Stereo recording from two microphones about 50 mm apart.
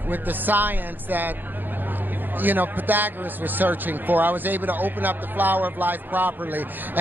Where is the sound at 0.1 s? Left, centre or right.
Right.